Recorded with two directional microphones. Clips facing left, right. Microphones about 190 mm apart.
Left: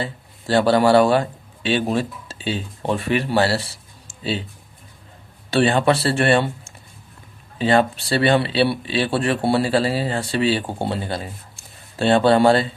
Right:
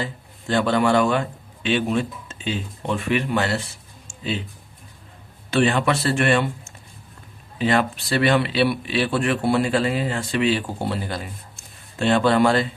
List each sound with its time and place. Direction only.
0.0 s speech: 35° left (ahead or behind)
5.5 s speech: 30° left (ahead or behind)
7.6 s speech: 30° left (ahead or behind)